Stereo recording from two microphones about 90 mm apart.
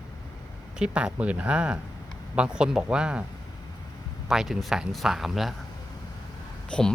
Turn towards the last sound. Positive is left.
turn(degrees=10)  # may be behind; listen again after turning